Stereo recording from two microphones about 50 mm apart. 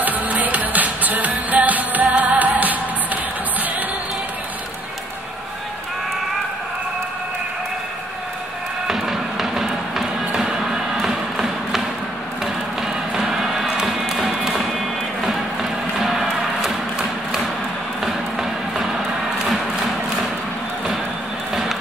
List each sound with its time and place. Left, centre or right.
0.0 s music: right
8.8 s music: centre
13.1 s music: centre
16.0 s a sound: centre
18.0 s run: centre